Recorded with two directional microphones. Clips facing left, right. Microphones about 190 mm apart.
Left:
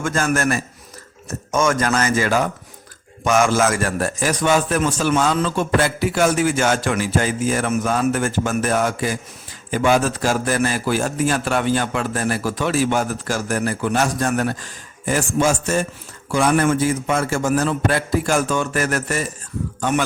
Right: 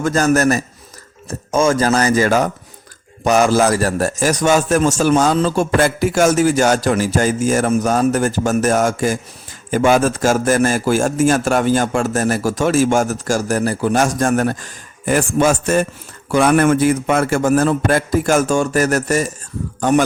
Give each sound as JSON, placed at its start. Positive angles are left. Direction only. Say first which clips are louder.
{"t": 0.0, "sound": "a man's voice", "louder": "right 6 dB", "side_deg": -40}